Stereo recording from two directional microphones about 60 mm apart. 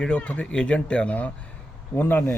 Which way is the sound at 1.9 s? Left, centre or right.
Left.